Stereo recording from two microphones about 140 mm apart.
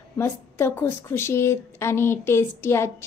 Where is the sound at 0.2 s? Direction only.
15° left (ahead or behind).